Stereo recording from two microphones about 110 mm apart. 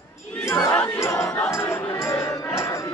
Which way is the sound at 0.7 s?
25° left (ahead or behind).